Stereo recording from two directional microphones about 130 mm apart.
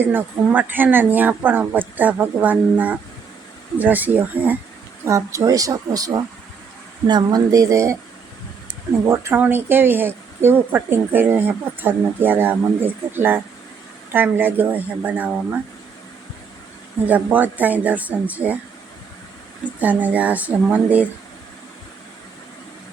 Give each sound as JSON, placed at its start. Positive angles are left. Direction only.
{"t": 0.0, "sound": "a woman's voice", "side_deg": -15}
{"t": 9.0, "sound": "speech", "side_deg": -20}
{"t": 17.1, "sound": "speech", "side_deg": -10}
{"t": 19.6, "sound": "speech", "side_deg": -10}